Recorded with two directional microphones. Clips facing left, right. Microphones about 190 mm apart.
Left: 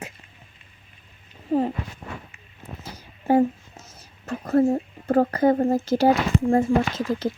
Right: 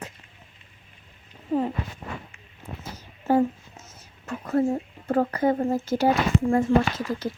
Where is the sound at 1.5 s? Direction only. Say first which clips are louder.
Left 3 dB; 40° left (ahead or behind).